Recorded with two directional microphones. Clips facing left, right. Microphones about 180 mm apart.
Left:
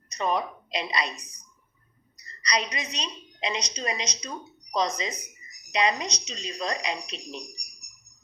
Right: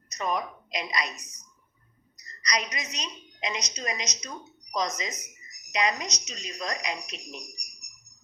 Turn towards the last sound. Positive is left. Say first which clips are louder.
# left 2 dB
turn(degrees=30)  # may be behind; listen again after turning